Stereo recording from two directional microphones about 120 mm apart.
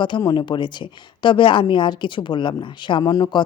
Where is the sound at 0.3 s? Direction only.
40° left (ahead or behind).